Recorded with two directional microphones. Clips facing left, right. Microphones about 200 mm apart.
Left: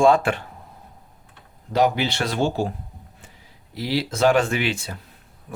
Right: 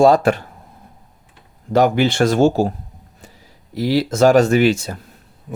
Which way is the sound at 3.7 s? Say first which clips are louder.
Right 7 dB; 45° right (ahead or behind).